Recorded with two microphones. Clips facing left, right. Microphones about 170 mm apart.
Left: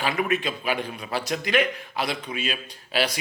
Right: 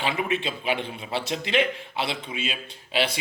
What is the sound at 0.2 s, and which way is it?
A man's voice, 25° right (ahead or behind).